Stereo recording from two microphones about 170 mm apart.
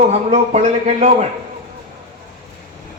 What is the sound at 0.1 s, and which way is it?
A man's voice, 40° right (ahead or behind).